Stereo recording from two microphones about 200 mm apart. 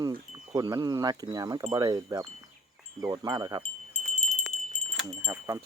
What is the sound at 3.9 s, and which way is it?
Wind chime, 35° left (ahead or behind).